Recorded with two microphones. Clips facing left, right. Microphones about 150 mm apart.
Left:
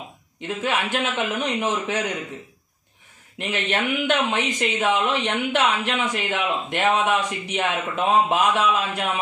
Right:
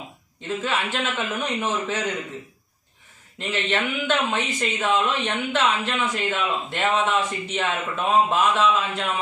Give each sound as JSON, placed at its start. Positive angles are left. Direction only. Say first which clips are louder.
{"t": 0.7, "sound": "a woman's voice", "louder": "left 3 dB", "side_deg": 15}
{"t": 3.3, "sound": "a woman's voice", "louder": "even", "side_deg": 15}